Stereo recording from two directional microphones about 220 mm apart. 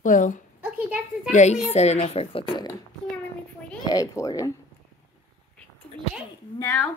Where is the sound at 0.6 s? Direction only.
5° right (ahead or behind).